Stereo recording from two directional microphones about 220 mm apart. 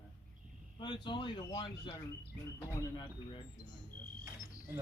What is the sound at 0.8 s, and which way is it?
Speech, 20° left (ahead or behind).